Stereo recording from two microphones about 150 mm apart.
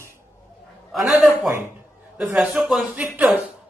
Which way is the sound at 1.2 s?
15° right (ahead or behind).